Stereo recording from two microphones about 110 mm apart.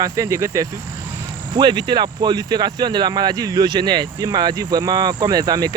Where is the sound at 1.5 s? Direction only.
40° right (ahead or behind).